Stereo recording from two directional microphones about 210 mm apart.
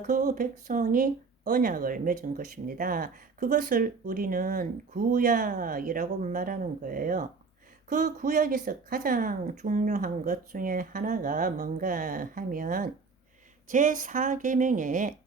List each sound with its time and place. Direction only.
0.1 s speech: 40° right (ahead or behind)